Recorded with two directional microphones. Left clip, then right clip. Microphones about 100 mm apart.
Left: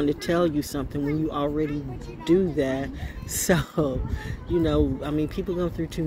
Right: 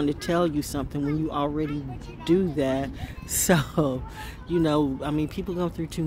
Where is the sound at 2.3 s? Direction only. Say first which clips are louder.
Left 1 dB; 70° right (ahead or behind).